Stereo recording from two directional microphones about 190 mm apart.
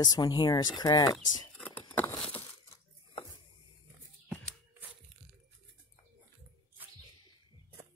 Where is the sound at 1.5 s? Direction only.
10° left (ahead or behind).